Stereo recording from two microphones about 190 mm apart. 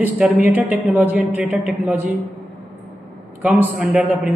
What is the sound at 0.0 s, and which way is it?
A man's voice, 10° right (ahead or behind).